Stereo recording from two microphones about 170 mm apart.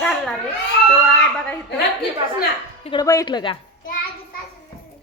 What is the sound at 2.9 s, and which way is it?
Speech, 20° left (ahead or behind).